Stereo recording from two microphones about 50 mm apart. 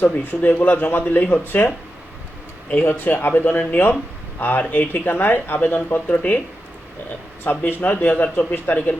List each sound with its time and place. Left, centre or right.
0.0 s speech: left
2.7 s speech: left
6.1 s speech: left
7.4 s speech: left